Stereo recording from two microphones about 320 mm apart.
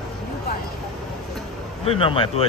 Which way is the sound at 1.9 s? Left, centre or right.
Centre.